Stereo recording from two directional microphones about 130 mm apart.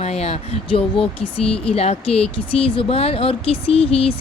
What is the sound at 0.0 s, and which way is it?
Speech, 55° left (ahead or behind).